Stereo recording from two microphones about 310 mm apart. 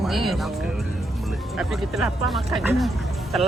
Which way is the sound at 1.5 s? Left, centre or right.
Centre.